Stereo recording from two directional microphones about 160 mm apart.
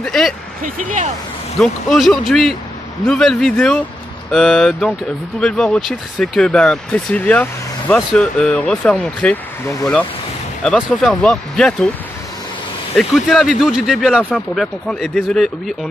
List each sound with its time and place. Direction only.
0.0 s speech: centre (ahead or behind)
0.6 s speech: 55° right (ahead or behind)
1.6 s speech: centre (ahead or behind)
10.6 s speech: 5° left (ahead or behind)
12.9 s speech: centre (ahead or behind)